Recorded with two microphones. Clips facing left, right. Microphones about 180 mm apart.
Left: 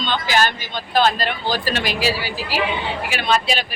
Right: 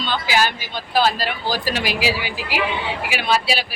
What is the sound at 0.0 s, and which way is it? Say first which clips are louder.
A woman's voice: left 1 dB; 5° right (ahead or behind).